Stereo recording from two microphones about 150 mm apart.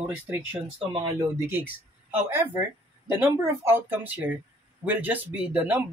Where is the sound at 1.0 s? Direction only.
15° right (ahead or behind).